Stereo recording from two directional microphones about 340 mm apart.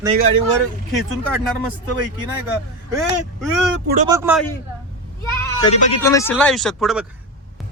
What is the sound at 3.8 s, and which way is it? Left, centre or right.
Speech, right.